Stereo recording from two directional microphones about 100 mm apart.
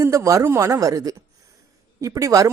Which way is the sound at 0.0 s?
30° right (ahead or behind).